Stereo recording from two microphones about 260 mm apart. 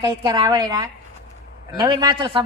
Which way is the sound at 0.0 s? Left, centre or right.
Centre.